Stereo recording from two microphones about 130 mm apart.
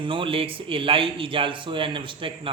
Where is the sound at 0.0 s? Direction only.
40° right (ahead or behind).